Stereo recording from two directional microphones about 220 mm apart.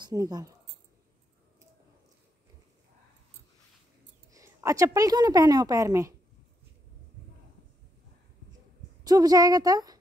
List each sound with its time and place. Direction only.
0.0 s speech: 15° right (ahead or behind)
4.3 s a woman's voice: 15° right (ahead or behind)
9.0 s a woman's voice: 15° right (ahead or behind)